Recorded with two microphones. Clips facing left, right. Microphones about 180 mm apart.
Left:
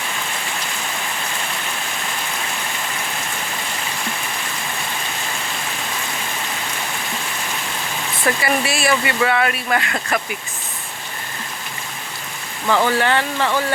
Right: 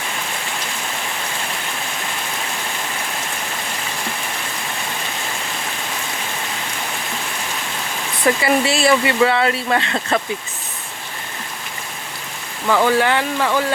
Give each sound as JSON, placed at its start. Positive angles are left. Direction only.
{"t": 8.2, "sound": "speech", "side_deg": -25}
{"t": 12.6, "sound": "speech", "side_deg": 0}
{"t": 13.0, "sound": "speech", "side_deg": -10}